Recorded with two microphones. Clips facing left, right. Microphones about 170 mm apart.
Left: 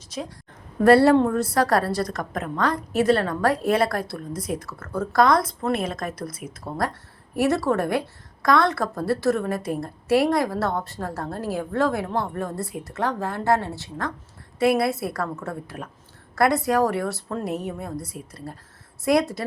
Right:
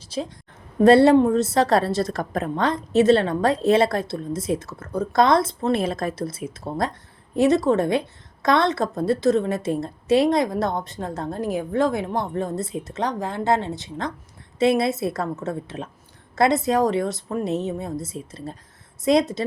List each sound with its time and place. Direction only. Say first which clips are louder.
0.1 s a woman's voice: right 4 dB; 30° right (ahead or behind)